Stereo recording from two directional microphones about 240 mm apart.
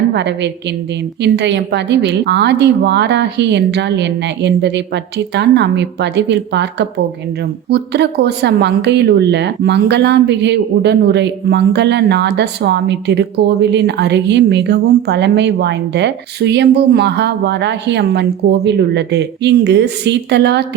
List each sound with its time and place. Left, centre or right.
0.1 s speech: right